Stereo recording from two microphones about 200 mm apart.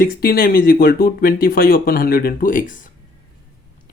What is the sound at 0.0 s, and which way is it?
Speech, 50° left (ahead or behind).